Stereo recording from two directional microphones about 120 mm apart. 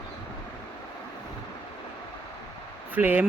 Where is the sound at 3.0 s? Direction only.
15° right (ahead or behind).